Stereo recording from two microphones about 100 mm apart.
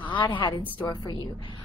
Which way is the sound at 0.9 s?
45° left (ahead or behind).